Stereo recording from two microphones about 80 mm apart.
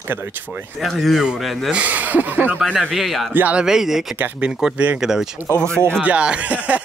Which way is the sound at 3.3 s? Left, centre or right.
Right.